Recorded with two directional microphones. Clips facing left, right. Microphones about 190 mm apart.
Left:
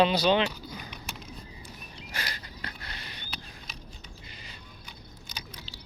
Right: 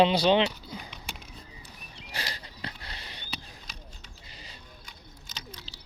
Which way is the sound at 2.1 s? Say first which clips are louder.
Right 1 dB; 30° right (ahead or behind).